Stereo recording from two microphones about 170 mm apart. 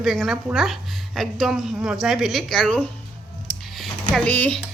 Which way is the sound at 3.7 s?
Centre (ahead or behind).